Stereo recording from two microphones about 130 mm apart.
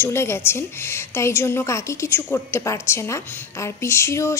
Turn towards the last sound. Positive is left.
turn(degrees=20)  # may be behind; listen again after turning